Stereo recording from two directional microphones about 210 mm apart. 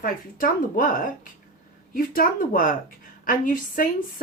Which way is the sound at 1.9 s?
40° left (ahead or behind).